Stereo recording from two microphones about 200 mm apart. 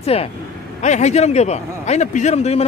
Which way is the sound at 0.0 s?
30° left (ahead or behind).